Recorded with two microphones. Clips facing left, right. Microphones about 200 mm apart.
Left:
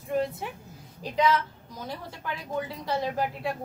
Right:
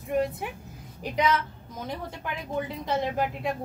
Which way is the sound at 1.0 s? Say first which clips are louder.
Left 1 dB; 20° right (ahead or behind).